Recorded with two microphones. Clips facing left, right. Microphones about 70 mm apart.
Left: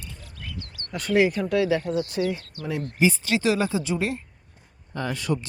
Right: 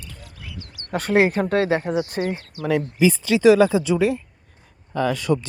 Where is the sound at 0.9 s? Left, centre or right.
Right.